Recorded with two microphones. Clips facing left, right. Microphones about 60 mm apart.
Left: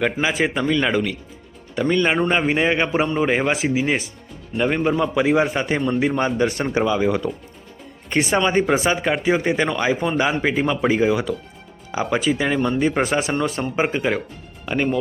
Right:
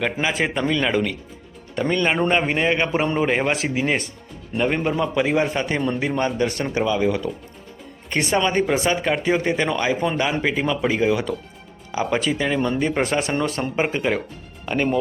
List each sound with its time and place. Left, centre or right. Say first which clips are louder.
0.0 s speech: left 2 dB; centre